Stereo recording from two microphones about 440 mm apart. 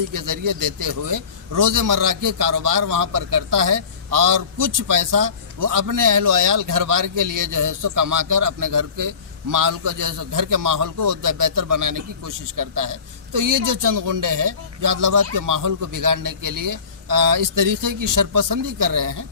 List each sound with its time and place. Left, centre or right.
0.1 s a man's voice: right